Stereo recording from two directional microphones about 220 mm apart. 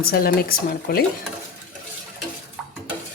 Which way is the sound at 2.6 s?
5° right (ahead or behind).